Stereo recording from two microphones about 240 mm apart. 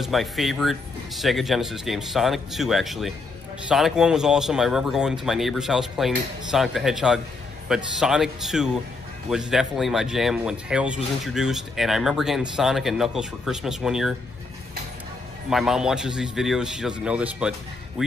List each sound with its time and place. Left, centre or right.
0.0 s speech: centre
15.5 s speech: centre